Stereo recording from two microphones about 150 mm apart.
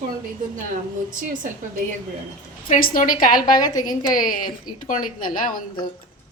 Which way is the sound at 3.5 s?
25° left (ahead or behind).